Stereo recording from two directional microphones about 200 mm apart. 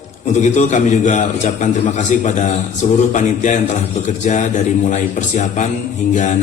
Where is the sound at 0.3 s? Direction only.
35° left (ahead or behind).